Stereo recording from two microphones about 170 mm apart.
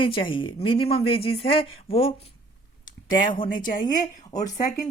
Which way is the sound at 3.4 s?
55° left (ahead or behind).